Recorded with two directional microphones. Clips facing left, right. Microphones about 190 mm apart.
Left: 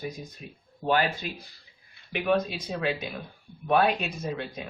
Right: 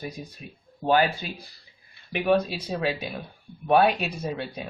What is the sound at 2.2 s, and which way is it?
Speech, 35° right (ahead or behind).